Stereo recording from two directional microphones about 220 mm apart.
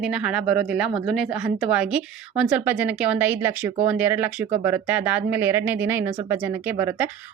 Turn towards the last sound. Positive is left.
turn(degrees=-10)  # may be behind; listen again after turning